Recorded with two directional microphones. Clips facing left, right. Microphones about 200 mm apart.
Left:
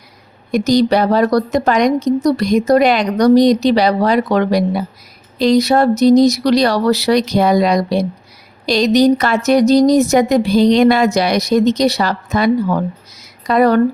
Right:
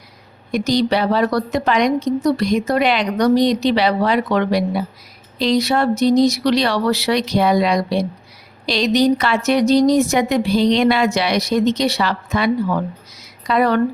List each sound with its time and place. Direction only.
0.5 s a woman's voice: 45° left (ahead or behind)